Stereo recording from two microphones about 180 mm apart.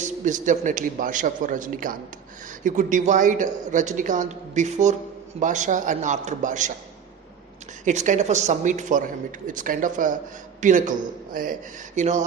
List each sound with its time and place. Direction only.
0.0 s a man's voice: 45° right (ahead or behind)
7.9 s a man's voice: 45° right (ahead or behind)